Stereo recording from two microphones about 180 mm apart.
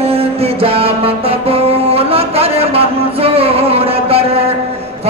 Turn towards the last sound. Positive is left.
turn(degrees=-35)  # may be behind; listen again after turning